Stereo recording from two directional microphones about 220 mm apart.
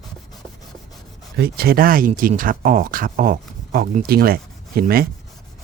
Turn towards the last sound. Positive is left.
turn(degrees=-45)  # may be behind; listen again after turning